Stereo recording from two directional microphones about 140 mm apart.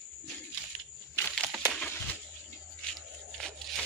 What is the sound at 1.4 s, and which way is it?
Crushing, 15° right (ahead or behind).